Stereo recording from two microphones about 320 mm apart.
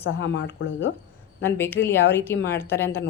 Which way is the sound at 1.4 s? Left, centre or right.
Centre.